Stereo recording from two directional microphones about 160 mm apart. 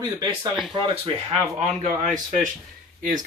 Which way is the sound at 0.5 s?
Centre (ahead or behind).